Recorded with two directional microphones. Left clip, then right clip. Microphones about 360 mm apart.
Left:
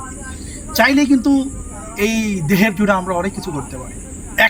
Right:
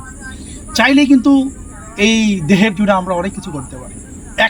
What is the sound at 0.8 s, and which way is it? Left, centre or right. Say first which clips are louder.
Speech: right 3 dB; centre.